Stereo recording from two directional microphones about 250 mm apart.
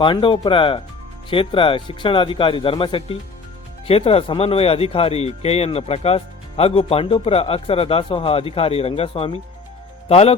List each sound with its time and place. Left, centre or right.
0.0 s speech: centre